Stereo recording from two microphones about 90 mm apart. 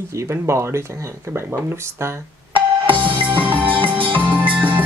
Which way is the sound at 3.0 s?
60° right (ahead or behind).